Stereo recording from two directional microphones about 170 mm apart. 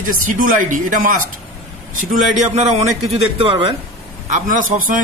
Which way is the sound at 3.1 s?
35° right (ahead or behind).